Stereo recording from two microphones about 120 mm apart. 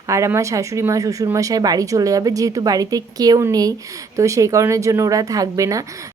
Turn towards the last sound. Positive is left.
turn(degrees=-30)  # may be behind; listen again after turning